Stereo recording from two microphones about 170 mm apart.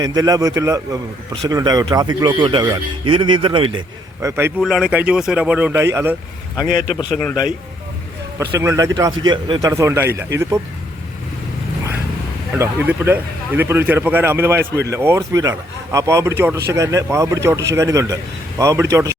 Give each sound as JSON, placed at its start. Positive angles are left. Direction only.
{"t": 0.0, "sound": "a man's voice", "side_deg": -20}
{"t": 4.2, "sound": "speech", "side_deg": -15}
{"t": 4.6, "sound": "speech", "side_deg": -5}
{"t": 6.6, "sound": "a man's voice", "side_deg": 25}
{"t": 8.5, "sound": "a man's voice", "side_deg": -20}
{"t": 12.5, "sound": "speech", "side_deg": -10}